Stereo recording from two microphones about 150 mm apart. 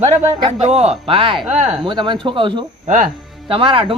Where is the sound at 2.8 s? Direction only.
60° right (ahead or behind).